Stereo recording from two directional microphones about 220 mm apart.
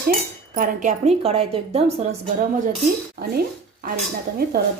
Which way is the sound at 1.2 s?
25° right (ahead or behind).